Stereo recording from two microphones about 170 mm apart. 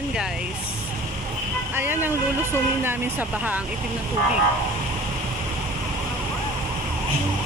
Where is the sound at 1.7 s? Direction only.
10° right (ahead or behind).